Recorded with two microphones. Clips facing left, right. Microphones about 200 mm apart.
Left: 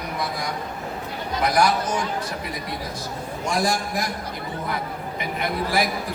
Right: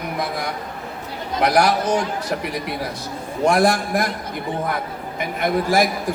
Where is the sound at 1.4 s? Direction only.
65° right (ahead or behind).